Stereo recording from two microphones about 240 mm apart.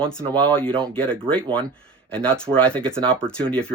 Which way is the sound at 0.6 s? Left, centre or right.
Right.